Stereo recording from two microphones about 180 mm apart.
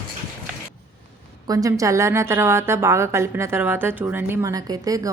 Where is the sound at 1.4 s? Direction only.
20° right (ahead or behind).